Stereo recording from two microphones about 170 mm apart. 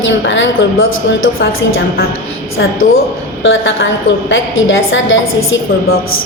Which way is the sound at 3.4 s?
90° left.